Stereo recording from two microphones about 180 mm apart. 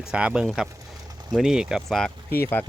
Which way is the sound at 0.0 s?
5° right (ahead or behind).